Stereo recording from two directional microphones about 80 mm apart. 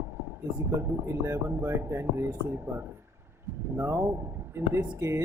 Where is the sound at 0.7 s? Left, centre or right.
Right.